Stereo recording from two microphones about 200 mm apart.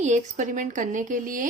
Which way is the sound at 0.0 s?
35° right (ahead or behind).